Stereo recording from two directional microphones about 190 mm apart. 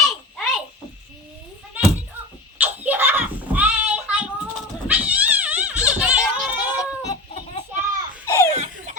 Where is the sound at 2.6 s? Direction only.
10° right (ahead or behind).